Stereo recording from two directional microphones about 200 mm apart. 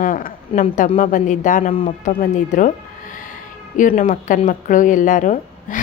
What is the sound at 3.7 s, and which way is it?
A woman's voice, 40° left (ahead or behind).